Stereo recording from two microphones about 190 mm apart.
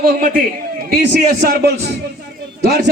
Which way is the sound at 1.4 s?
55° right (ahead or behind).